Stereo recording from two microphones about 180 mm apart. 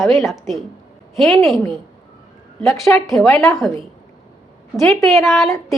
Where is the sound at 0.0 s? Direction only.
Centre (ahead or behind).